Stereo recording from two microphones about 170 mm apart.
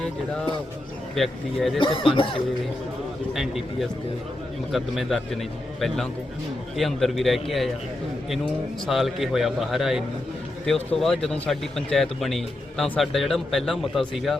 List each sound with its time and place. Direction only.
1.1 s a man's voice: centre (ahead or behind)
1.8 s speech: 30° left (ahead or behind)
3.3 s a man's voice: centre (ahead or behind)
8.9 s a man's voice: centre (ahead or behind)